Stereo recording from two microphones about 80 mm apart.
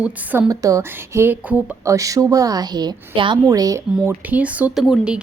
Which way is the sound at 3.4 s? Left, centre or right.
Right.